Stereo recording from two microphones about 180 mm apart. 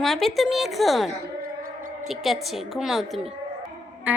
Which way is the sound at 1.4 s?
50° right (ahead or behind).